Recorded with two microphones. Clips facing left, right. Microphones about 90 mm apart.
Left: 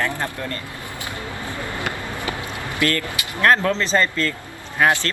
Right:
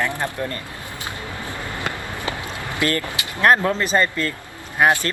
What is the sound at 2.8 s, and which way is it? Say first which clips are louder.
Speech: even; 20° right (ahead or behind).